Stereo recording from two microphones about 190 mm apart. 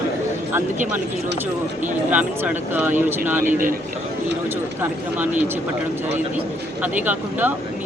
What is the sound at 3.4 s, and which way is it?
Speech, 45° right (ahead or behind).